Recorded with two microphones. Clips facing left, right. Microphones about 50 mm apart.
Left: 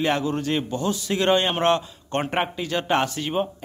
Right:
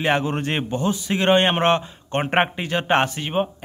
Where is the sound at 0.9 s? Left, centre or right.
Right.